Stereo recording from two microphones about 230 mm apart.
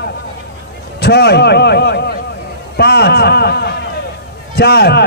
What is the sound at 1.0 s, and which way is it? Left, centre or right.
A man's voice, left.